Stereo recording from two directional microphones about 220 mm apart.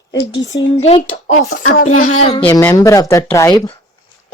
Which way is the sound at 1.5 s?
40° left (ahead or behind).